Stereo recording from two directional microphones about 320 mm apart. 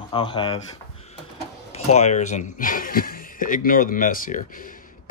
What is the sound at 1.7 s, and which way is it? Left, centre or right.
Speech, left.